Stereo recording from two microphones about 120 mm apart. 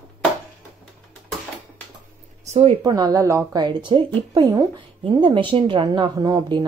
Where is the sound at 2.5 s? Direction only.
55° right (ahead or behind).